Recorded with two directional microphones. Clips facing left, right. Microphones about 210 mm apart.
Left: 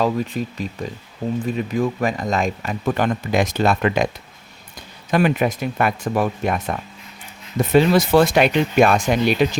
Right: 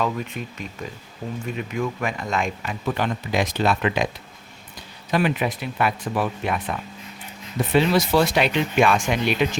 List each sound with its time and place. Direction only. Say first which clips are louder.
0.0 s speech: left 5 dB; 35° left (ahead or behind)
5.1 s speech: left 4 dB; 45° left (ahead or behind)